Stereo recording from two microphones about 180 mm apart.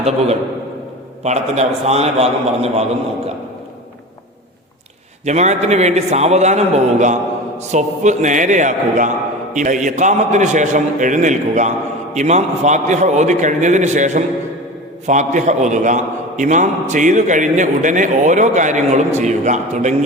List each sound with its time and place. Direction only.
1.2 s a man's voice: 35° right (ahead or behind)
5.2 s a man's voice: 40° right (ahead or behind)